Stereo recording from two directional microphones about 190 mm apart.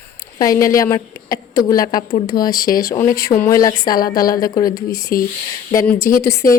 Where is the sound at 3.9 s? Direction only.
50° left (ahead or behind).